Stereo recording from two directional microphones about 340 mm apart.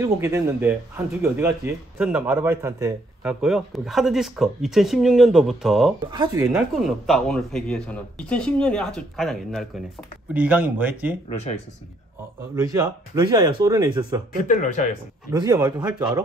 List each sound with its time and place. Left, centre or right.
0.0 s speech: centre
6.0 s speech: centre
12.5 s speech: centre
14.5 s speech: left
15.3 s speech: centre